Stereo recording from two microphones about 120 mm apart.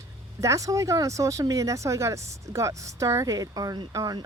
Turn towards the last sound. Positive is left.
turn(degrees=-35)  # may be behind; listen again after turning